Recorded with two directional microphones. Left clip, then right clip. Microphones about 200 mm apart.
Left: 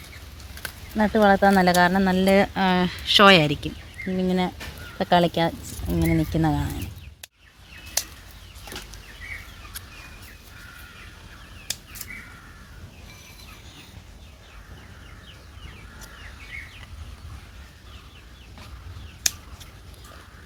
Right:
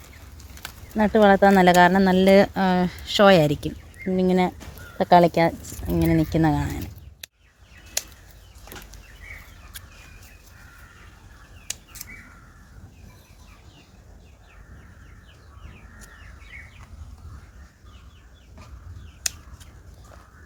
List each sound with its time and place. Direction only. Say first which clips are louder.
0.9 s speech: right 2 dB; 40° right (ahead or behind)